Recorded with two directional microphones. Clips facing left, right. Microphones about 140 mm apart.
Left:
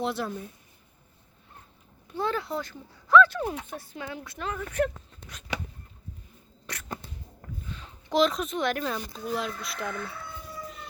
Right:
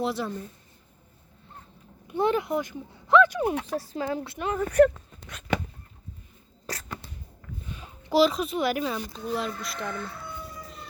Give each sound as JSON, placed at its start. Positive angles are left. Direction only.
{"t": 0.0, "sound": "a child's voice", "side_deg": 0}
{"t": 2.0, "sound": "speech", "side_deg": -20}
{"t": 3.5, "sound": "speech", "side_deg": -90}
{"t": 3.9, "sound": "speech", "side_deg": -35}
{"t": 5.5, "sound": "a sound", "side_deg": -50}
{"t": 6.7, "sound": "a sound", "side_deg": -35}
{"t": 7.7, "sound": "a child's voice", "side_deg": -10}